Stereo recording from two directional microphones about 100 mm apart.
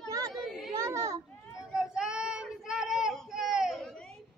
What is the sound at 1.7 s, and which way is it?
Child singing, 5° right (ahead or behind).